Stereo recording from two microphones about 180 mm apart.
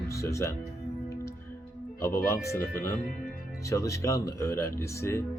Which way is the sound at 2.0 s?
15° left (ahead or behind).